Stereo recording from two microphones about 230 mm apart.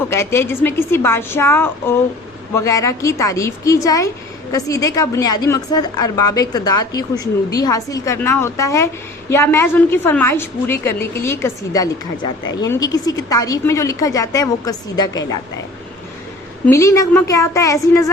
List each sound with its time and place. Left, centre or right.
0.1 s a woman's voice: centre
16.6 s a woman's voice: centre